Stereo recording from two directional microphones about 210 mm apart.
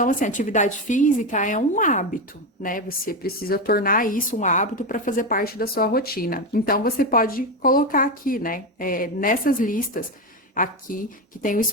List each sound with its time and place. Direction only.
0.0 s a woman's voice: 40° left (ahead or behind)